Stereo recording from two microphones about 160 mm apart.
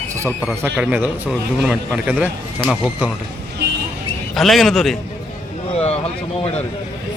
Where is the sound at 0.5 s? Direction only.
10° right (ahead or behind).